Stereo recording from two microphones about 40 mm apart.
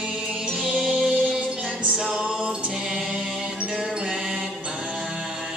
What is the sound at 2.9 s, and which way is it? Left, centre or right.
Music, centre.